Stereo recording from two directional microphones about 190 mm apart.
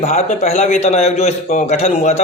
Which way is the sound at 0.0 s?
35° left (ahead or behind).